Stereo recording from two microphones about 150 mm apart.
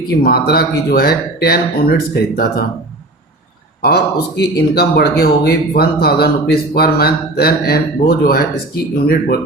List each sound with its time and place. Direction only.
0.2 s speech: 90° left
3.8 s speech: 90° left